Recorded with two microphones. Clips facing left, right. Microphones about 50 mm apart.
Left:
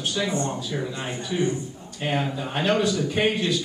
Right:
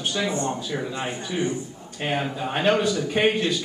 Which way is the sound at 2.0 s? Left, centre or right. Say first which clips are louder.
Even; centre.